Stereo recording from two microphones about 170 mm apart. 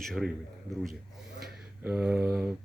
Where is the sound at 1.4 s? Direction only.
10° right (ahead or behind).